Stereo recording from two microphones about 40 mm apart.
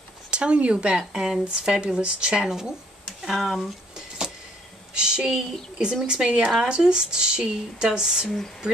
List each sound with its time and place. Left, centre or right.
0.3 s speech: right
0.9 s speech: centre
3.2 s speech: centre
4.9 s a woman's voice: right